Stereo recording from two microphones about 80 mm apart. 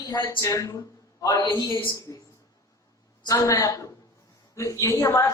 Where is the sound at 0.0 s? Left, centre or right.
Left.